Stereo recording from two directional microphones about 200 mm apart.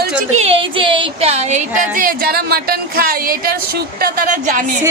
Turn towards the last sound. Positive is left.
turn(degrees=-45)  # may be behind; listen again after turning